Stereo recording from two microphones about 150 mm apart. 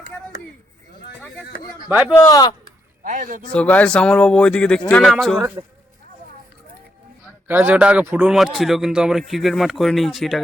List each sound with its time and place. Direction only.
1.9 s speech: 10° right (ahead or behind)
2.1 s speech: 25° left (ahead or behind)
3.0 s a man's voice: 60° right (ahead or behind)
3.5 s speech: 10° left (ahead or behind)
7.4 s speech: 15° right (ahead or behind)